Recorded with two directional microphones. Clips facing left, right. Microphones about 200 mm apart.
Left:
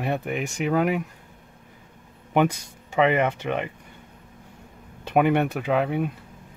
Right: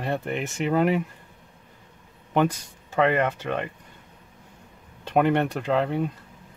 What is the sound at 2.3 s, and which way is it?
Speech, 15° left (ahead or behind).